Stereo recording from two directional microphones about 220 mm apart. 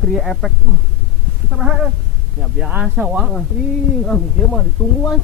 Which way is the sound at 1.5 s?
5° right (ahead or behind).